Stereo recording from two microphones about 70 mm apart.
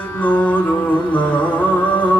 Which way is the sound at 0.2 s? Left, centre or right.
Left.